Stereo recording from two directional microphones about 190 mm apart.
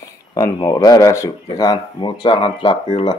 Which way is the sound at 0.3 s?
20° left (ahead or behind).